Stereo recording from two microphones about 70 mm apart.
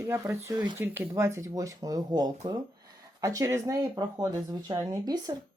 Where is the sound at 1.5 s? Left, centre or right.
Right.